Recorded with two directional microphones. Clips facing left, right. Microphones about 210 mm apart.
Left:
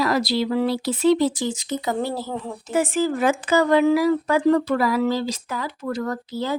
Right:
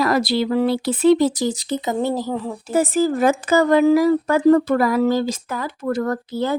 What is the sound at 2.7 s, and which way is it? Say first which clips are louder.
Speech: right 3 dB; 40° right (ahead or behind).